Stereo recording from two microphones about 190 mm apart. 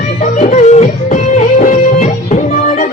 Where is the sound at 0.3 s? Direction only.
35° left (ahead or behind).